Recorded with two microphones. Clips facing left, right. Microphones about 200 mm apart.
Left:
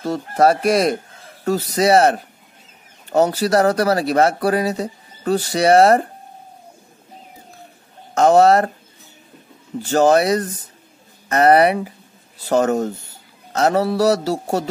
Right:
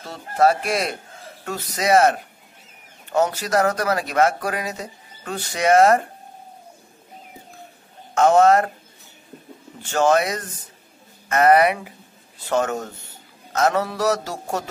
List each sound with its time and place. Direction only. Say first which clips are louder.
0.0 s speech: left 3 dB; 40° left (ahead or behind)
8.1 s speech: left 2 dB; 35° left (ahead or behind)
9.8 s speech: left 5 dB; 35° left (ahead or behind)